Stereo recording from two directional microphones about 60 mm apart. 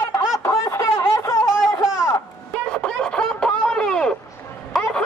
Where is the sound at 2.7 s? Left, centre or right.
Centre.